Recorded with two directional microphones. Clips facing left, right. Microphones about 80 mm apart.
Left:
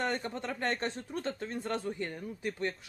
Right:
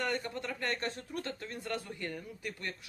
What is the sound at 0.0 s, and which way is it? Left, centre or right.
A man's voice, left.